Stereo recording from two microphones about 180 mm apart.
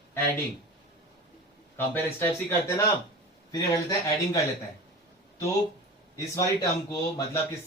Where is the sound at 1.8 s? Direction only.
10° left (ahead or behind).